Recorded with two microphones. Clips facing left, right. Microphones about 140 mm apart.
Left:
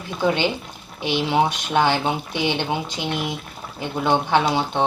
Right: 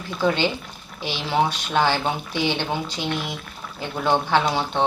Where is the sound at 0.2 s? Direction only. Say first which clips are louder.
Left 1 dB; 15° left (ahead or behind).